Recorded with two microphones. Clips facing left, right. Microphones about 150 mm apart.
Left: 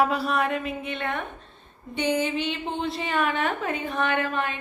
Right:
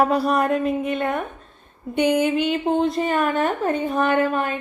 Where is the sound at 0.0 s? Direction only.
40° right (ahead or behind).